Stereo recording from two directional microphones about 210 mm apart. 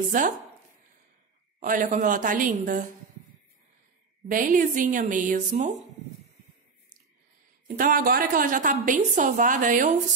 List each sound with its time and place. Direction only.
0.1 s a woman's voice: 40° right (ahead or behind)
1.6 s a woman's voice: 40° right (ahead or behind)
4.3 s a woman's voice: 40° right (ahead or behind)
7.6 s a woman's voice: 40° right (ahead or behind)